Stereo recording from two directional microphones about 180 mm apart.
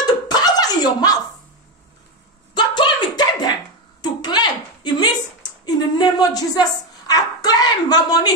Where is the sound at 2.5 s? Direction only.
25° left (ahead or behind).